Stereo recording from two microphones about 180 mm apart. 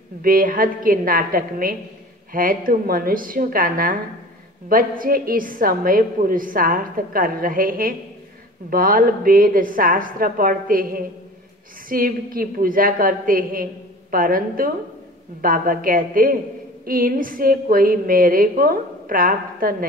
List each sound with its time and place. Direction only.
0.2 s a woman's voice: 50° right (ahead or behind)